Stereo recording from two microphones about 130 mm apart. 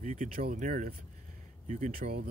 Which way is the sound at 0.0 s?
85° right.